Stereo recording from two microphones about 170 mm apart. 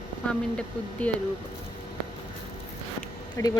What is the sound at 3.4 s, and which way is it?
Speech, 20° left (ahead or behind).